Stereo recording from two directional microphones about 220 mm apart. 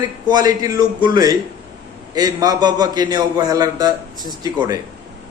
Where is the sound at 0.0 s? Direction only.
20° right (ahead or behind).